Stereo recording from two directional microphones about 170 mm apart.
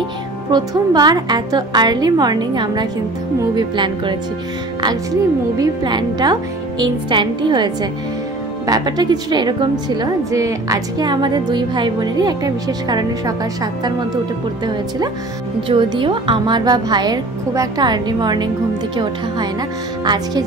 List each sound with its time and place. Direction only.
0.5 s a woman's voice: 25° right (ahead or behind)
15.7 s a woman's voice: 30° right (ahead or behind)